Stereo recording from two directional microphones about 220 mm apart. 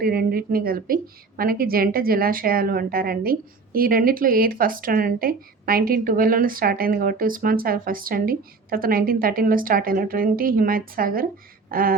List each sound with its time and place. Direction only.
0.0 s a woman's voice: 45° right (ahead or behind)